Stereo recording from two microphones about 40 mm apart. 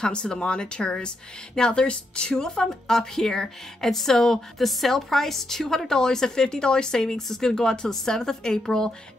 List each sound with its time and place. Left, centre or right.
0.0 s a woman's voice: left